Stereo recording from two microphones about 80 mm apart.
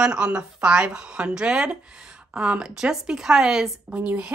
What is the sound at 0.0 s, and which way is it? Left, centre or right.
A woman's voice, centre.